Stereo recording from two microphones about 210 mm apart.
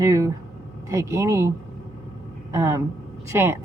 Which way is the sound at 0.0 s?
15° right (ahead or behind).